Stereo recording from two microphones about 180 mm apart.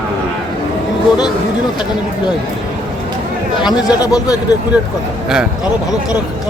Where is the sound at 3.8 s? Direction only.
20° left (ahead or behind).